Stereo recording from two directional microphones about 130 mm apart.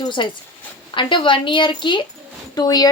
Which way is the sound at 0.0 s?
40° left (ahead or behind).